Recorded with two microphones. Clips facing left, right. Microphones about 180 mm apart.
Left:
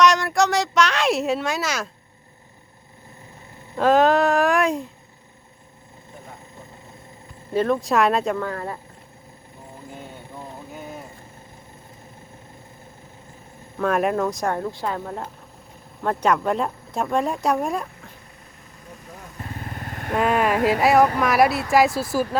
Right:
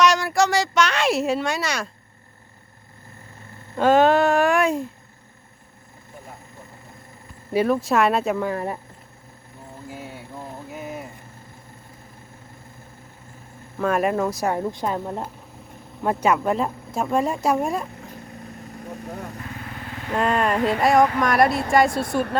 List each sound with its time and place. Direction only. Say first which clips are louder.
0.0 s a sound: left 1 dB; centre (ahead or behind)
3.8 s speech: right 1 dB; centre (ahead or behind)
7.5 s speech: even; 5° right (ahead or behind)
8.4 s speech: right 3 dB; 15° right (ahead or behind)
9.9 s a sound: right 2 dB; 5° right (ahead or behind)
13.7 s speech: even; centre (ahead or behind)
14.6 s a woman's voice: right 2 dB; 20° right (ahead or behind); by 17.8 s centre (ahead or behind)
19.0 s speech: right 8 dB; 65° right (ahead or behind)
19.8 s vehicle: left 1 dB; 50° left (ahead or behind)
20.1 s speech: left 1 dB; 5° left (ahead or behind)